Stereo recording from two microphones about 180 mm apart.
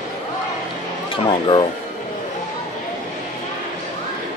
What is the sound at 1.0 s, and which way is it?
Speech, 25° left (ahead or behind).